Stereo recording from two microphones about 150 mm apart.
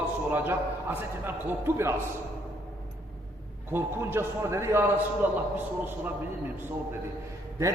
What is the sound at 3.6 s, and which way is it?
A man's voice, 15° right (ahead or behind).